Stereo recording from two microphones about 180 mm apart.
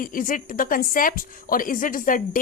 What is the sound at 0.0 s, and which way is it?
A woman's voice, 50° left (ahead or behind).